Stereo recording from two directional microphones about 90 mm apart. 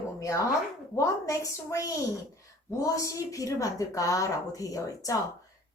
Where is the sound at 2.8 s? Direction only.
35° left (ahead or behind).